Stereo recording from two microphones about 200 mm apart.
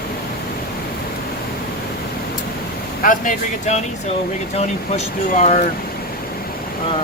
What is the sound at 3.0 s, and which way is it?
Speech, 40° left (ahead or behind).